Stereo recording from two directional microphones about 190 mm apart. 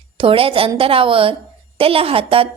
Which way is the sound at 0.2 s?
30° right (ahead or behind).